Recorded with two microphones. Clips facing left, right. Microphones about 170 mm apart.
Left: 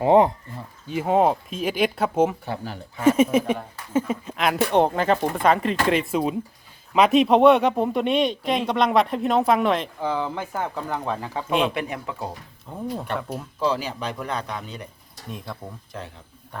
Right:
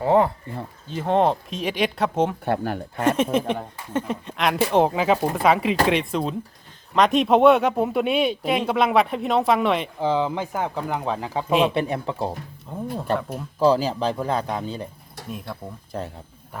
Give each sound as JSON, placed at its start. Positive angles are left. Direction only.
{"t": 0.0, "sound": "speech", "side_deg": 20}
{"t": 2.4, "sound": "speech", "side_deg": -55}
{"t": 3.3, "sound": "speech", "side_deg": 5}
{"t": 10.0, "sound": "speech", "side_deg": -20}
{"t": 11.7, "sound": "speech", "side_deg": -30}
{"t": 12.7, "sound": "speech", "side_deg": 0}
{"t": 13.6, "sound": "a man's voice", "side_deg": -35}
{"t": 15.3, "sound": "speech", "side_deg": -5}
{"t": 15.9, "sound": "a man's voice", "side_deg": -40}